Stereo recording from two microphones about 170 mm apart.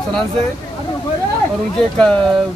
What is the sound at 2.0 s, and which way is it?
Speech, 5° left (ahead or behind).